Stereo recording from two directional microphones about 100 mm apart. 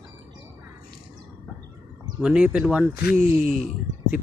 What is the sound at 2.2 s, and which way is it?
Speech, 10° right (ahead or behind).